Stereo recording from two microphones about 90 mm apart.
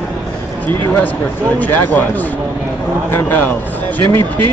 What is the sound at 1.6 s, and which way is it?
Speech, 20° left (ahead or behind).